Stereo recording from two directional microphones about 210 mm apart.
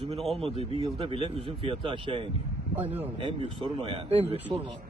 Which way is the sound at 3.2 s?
25° right (ahead or behind).